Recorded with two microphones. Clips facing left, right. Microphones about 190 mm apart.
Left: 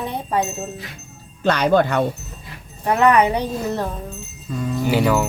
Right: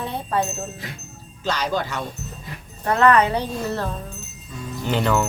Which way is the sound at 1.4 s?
60° left (ahead or behind).